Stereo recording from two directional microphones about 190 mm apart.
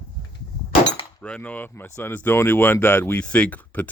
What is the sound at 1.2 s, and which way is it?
Speech, 5° left (ahead or behind).